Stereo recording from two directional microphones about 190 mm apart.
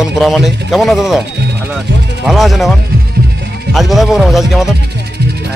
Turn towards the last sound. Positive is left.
turn(degrees=0)  # may be behind; listen again after turning